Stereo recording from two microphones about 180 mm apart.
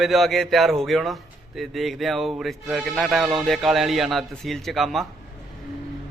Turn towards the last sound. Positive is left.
turn(degrees=0)  # may be behind; listen again after turning